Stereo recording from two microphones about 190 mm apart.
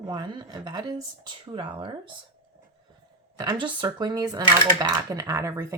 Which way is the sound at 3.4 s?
25° right (ahead or behind).